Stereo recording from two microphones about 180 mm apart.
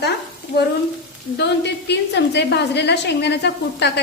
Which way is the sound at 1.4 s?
70° left (ahead or behind).